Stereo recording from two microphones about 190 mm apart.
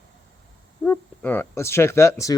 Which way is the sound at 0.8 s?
10° left (ahead or behind).